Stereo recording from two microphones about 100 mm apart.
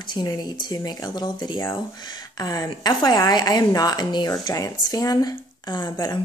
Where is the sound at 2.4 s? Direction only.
35° left (ahead or behind).